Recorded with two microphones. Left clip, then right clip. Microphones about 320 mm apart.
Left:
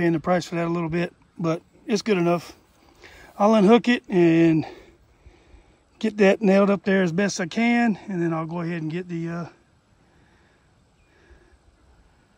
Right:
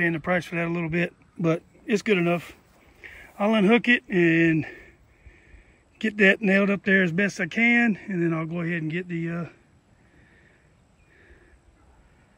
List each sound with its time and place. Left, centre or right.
0.0 s speech: left
0.6 s speech: centre
3.0 s a sound: left
3.5 s speech: centre
5.9 s speech: centre